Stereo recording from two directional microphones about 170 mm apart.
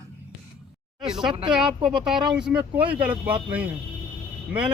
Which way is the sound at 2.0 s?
5° right (ahead or behind).